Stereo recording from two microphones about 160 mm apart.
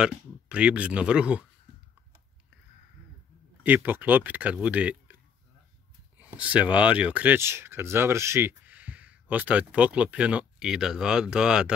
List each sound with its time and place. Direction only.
0.0 s speech: 5° right (ahead or behind)
3.6 s speech: 10° right (ahead or behind)
6.3 s speech: 10° right (ahead or behind)